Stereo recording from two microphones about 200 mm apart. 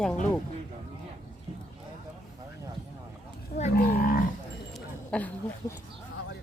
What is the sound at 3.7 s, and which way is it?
Livestock, 50° left (ahead or behind).